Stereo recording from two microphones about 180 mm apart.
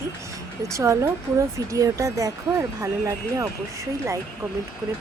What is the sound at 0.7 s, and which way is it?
Speech, 15° right (ahead or behind).